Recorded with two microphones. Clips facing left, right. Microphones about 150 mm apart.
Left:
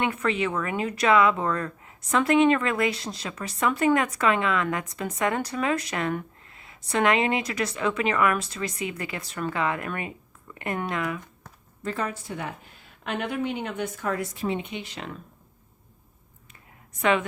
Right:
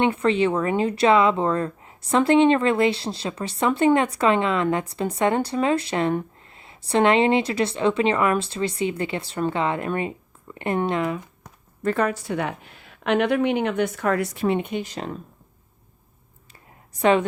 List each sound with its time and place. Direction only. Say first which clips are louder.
0.0 s speech: right 6 dB; 30° right (ahead or behind)
11.8 s a woman's voice: right 8 dB; 60° right (ahead or behind); by 15.2 s 40° right (ahead or behind)
16.9 s a woman's voice: right 5 dB; 35° right (ahead or behind)